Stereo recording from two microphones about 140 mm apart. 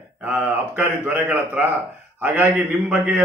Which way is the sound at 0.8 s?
15° right (ahead or behind).